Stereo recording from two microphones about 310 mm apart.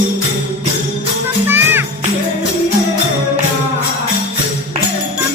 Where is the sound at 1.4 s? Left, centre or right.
Centre.